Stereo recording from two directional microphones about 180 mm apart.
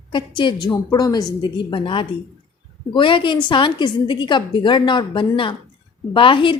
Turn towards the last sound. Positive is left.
turn(degrees=25)  # may be behind; listen again after turning